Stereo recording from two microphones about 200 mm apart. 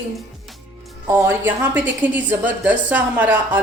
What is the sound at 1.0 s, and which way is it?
A woman's voice, 15° right (ahead or behind).